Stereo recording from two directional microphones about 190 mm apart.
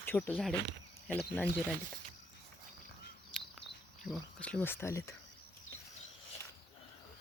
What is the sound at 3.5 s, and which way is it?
Speech, centre (ahead or behind).